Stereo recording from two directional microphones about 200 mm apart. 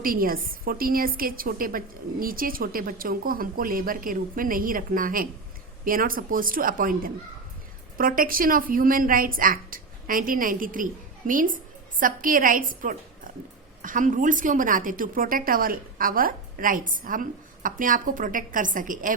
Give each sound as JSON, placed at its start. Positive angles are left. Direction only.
{"t": 0.0, "sound": "a woman's voice", "side_deg": -45}
{"t": 11.9, "sound": "a woman's voice", "side_deg": -45}